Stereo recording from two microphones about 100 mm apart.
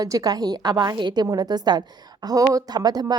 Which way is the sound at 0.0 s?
35° right (ahead or behind).